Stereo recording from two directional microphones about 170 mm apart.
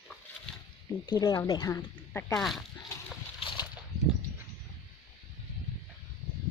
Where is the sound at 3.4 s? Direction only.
30° left (ahead or behind).